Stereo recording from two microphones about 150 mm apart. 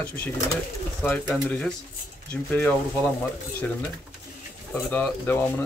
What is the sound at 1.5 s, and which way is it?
Speech, 10° left (ahead or behind).